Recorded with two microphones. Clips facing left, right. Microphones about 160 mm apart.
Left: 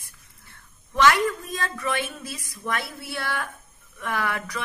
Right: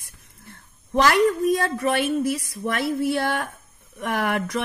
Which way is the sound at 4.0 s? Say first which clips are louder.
Right 4 dB; 50° right (ahead or behind).